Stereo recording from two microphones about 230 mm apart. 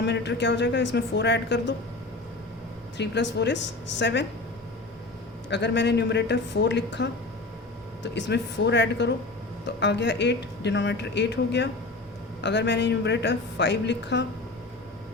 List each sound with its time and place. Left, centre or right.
0.0 s speech: left
3.0 s speech: left
5.5 s speech: left